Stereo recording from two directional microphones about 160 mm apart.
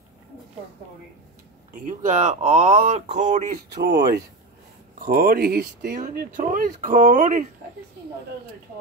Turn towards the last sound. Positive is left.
turn(degrees=-50)  # may be behind; listen again after turning